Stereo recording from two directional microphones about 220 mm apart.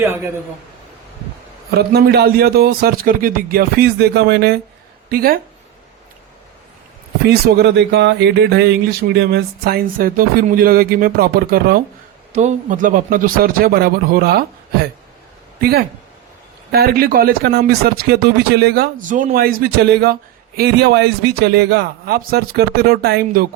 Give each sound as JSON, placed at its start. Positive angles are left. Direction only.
{"t": 1.9, "sound": "speech", "side_deg": -45}
{"t": 7.3, "sound": "speech", "side_deg": -50}
{"t": 12.3, "sound": "a man's voice", "side_deg": -35}
{"t": 16.7, "sound": "speech", "side_deg": -45}